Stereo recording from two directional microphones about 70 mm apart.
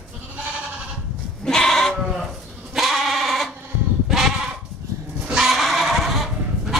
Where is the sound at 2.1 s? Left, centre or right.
Centre.